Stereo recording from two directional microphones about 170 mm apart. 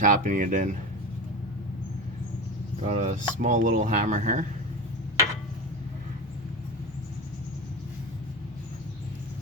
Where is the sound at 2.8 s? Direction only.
45° right (ahead or behind).